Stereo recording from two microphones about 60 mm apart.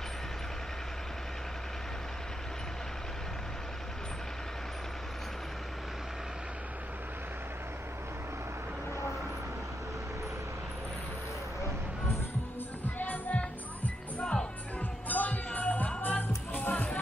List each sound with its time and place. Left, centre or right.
13.0 s music: left
13.4 s music: centre
15.0 s music: left